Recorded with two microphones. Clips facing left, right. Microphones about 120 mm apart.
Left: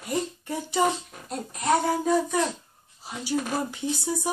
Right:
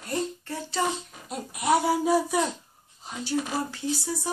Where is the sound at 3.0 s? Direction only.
15° left (ahead or behind).